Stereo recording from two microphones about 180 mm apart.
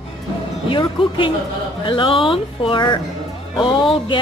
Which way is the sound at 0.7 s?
30° left (ahead or behind).